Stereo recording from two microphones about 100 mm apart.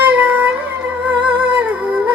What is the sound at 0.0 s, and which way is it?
Cat, 20° right (ahead or behind).